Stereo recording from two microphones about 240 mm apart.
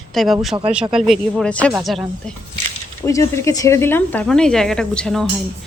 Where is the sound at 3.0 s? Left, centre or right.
Centre.